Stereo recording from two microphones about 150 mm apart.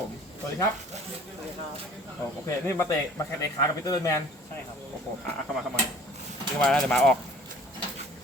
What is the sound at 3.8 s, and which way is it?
Speech, 25° left (ahead or behind).